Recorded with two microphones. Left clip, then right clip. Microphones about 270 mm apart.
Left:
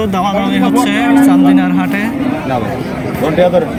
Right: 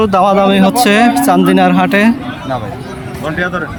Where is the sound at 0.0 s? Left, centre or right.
Right.